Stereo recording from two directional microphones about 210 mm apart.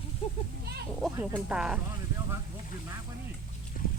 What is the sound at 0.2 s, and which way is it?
Children playing, 30° left (ahead or behind).